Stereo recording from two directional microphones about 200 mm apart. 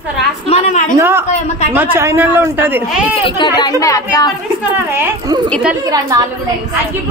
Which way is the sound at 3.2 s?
20° left (ahead or behind).